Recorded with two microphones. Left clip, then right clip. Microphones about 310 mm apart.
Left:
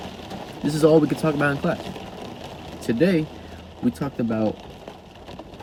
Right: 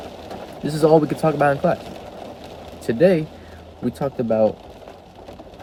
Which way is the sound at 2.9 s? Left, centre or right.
Right.